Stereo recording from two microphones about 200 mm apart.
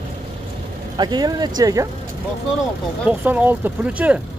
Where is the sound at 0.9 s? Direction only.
20° right (ahead or behind).